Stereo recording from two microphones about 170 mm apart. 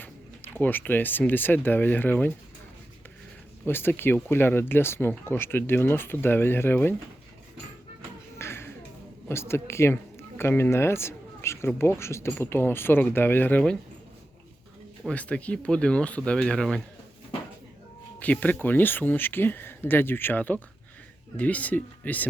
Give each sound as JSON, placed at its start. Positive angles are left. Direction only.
{"t": 0.5, "sound": "speech", "side_deg": 10}
{"t": 3.7, "sound": "speech", "side_deg": 10}
{"t": 8.4, "sound": "music", "side_deg": 15}
{"t": 9.3, "sound": "speech", "side_deg": 15}
{"t": 15.0, "sound": "speech", "side_deg": 5}
{"t": 18.2, "sound": "speech", "side_deg": 10}